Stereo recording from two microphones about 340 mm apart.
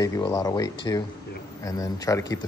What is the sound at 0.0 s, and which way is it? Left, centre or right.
A man's voice, centre.